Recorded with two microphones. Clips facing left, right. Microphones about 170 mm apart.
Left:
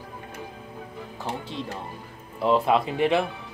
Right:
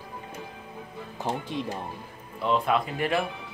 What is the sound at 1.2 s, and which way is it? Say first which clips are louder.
Speech: right 2 dB; 15° right (ahead or behind).